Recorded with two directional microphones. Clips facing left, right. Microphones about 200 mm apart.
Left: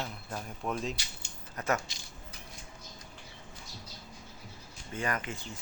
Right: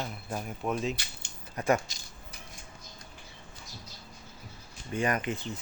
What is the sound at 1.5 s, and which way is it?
Speech, 15° right (ahead or behind).